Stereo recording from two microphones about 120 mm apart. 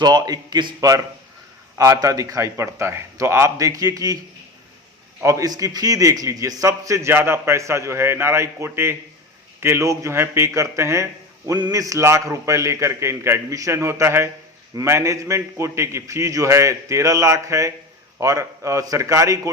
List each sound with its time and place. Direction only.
0.0 s a man's voice: 35° right (ahead or behind)
5.2 s a man's voice: 25° right (ahead or behind)